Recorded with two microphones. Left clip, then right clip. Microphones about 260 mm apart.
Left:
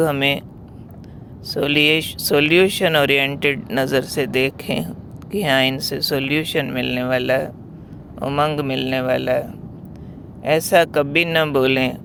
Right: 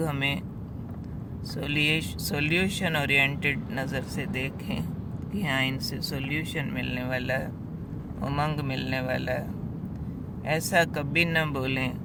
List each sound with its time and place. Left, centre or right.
0.0 s speech: left
1.5 s speech: left
10.4 s speech: left